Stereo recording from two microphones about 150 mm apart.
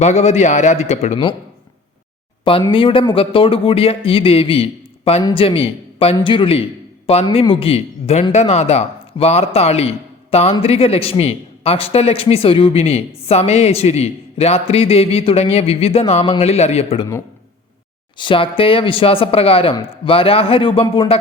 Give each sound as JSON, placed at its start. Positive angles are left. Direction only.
{"t": 0.0, "sound": "speech", "side_deg": 50}
{"t": 2.4, "sound": "a man's voice", "side_deg": 35}
{"t": 18.2, "sound": "a man's voice", "side_deg": 35}